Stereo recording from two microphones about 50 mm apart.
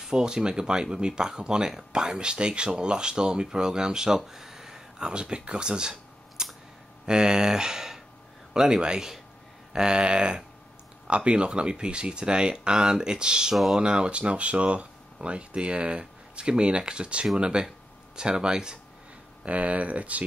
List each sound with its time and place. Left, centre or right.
0.0 s speech: centre
19.4 s speech: right